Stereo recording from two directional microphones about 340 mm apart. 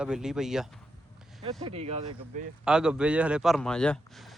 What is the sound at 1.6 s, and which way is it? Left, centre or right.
Speech, centre.